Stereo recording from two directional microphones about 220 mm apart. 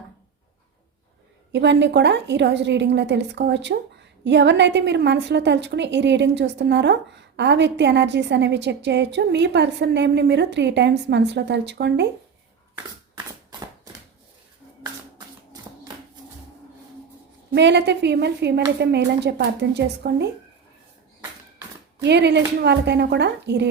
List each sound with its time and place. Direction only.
1.5 s a woman's voice: 50° right (ahead or behind)
17.5 s a woman's voice: 50° right (ahead or behind)
22.0 s a woman's voice: 50° right (ahead or behind)